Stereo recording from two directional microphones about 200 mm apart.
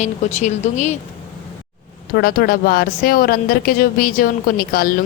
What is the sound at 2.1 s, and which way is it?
Speech, 50° left (ahead or behind).